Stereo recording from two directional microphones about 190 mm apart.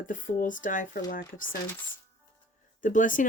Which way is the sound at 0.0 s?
45° left (ahead or behind).